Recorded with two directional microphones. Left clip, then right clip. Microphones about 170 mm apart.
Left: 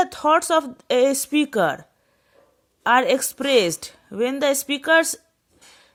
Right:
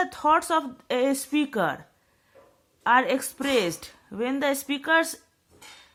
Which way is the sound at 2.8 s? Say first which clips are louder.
Left 4 dB; 45° left (ahead or behind).